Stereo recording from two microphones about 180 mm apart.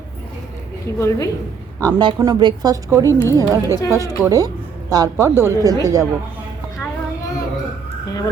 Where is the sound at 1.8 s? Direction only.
20° right (ahead or behind).